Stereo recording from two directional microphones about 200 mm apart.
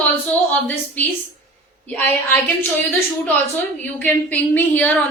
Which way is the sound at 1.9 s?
10° left (ahead or behind).